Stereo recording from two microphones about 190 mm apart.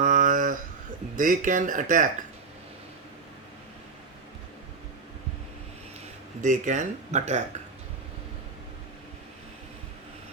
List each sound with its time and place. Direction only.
0.0 s a sound: 45° right (ahead or behind)
1.1 s speech: 45° right (ahead or behind)
6.4 s speech: 40° right (ahead or behind)